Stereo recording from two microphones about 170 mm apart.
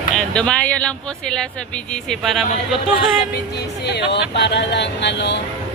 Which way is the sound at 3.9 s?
80° left.